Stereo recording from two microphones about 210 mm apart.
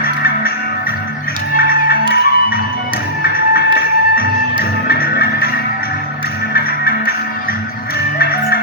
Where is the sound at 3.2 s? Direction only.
45° left (ahead or behind).